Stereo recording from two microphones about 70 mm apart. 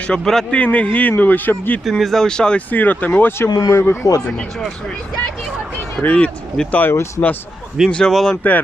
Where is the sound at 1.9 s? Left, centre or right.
Centre.